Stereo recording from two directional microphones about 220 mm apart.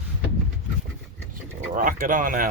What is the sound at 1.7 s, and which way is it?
Speech, 40° right (ahead or behind).